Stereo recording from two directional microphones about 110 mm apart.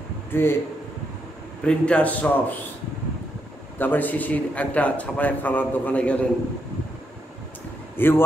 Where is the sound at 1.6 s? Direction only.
10° left (ahead or behind).